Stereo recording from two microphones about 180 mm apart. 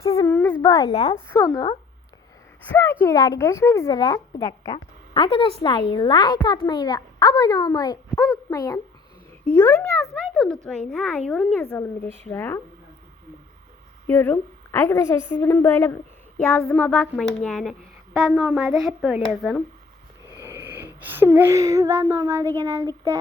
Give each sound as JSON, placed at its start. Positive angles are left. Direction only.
{"t": 0.6, "sound": "a woman's voice", "side_deg": 20}
{"t": 2.7, "sound": "a woman's voice", "side_deg": 10}
{"t": 10.3, "sound": "speech", "side_deg": 5}
{"t": 14.1, "sound": "a woman's voice", "side_deg": 15}
{"t": 20.4, "sound": "speech", "side_deg": -15}